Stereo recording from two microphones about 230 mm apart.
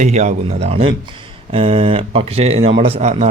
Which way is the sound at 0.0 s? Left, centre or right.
Right.